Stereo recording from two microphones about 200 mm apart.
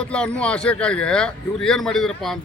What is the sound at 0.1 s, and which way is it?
Speech, 5° left (ahead or behind).